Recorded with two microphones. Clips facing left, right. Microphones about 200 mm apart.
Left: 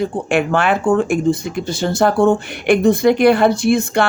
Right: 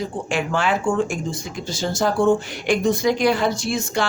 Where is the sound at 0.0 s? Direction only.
60° left (ahead or behind).